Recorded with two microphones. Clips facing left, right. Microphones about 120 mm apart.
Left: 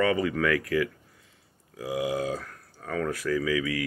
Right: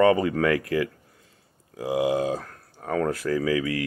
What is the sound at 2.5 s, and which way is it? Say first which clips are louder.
Speech: right 5 dB; 35° right (ahead or behind).